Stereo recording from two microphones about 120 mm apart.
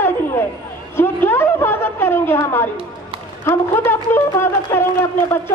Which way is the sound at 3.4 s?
20° left (ahead or behind).